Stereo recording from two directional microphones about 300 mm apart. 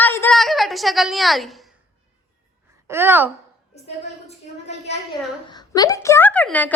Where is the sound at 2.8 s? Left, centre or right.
Centre.